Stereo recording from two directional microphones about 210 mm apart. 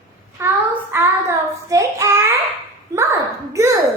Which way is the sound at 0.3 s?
10° right (ahead or behind).